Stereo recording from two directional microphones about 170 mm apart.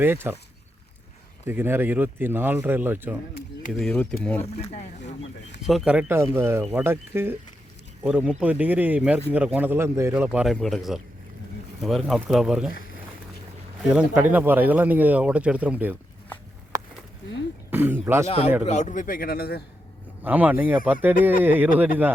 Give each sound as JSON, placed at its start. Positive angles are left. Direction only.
{"t": 0.0, "sound": "speech", "side_deg": -10}
{"t": 1.5, "sound": "speech", "side_deg": -15}
{"t": 3.7, "sound": "speech", "side_deg": 5}
{"t": 4.6, "sound": "speech", "side_deg": 40}
{"t": 5.6, "sound": "speech", "side_deg": -5}
{"t": 13.8, "sound": "speech", "side_deg": -5}
{"t": 17.7, "sound": "speech", "side_deg": -10}
{"t": 18.3, "sound": "a man's voice", "side_deg": 40}
{"t": 20.2, "sound": "speech", "side_deg": -10}